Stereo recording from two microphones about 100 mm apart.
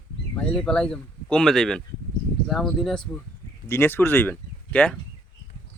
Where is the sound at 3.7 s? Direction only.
20° left (ahead or behind).